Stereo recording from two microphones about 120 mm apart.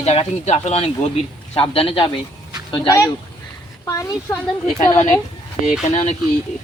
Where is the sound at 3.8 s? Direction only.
25° left (ahead or behind).